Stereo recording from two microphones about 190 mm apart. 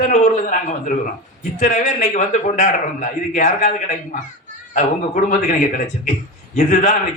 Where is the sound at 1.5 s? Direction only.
40° left (ahead or behind).